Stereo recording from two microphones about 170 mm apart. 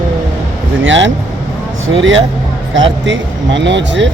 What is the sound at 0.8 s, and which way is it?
Speech, 90° right.